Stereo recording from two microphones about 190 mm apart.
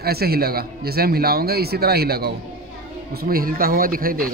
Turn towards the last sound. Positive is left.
turn(degrees=-50)  # may be behind; listen again after turning